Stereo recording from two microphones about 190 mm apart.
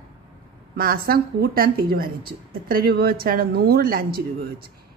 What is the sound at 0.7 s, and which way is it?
A woman's voice, 50° right (ahead or behind).